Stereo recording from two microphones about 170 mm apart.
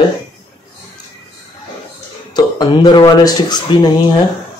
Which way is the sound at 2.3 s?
25° left (ahead or behind).